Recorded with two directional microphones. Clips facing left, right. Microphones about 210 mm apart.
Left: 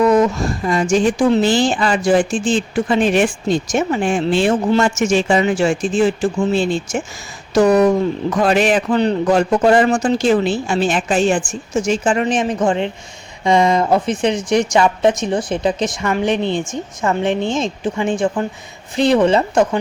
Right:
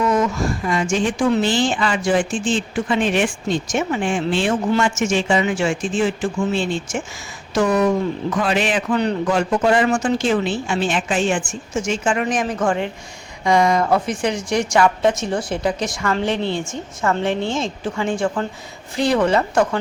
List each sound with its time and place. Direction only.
0.0 s a woman's voice: 35° left (ahead or behind)
12.2 s speech: 25° left (ahead or behind)